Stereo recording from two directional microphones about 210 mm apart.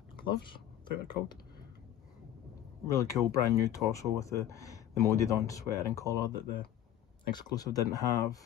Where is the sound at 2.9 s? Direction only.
15° left (ahead or behind).